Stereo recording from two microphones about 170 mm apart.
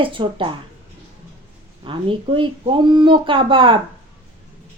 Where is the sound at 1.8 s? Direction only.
30° right (ahead or behind).